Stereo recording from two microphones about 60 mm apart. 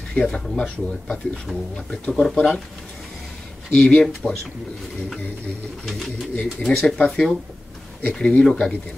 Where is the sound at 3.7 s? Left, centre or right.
Centre.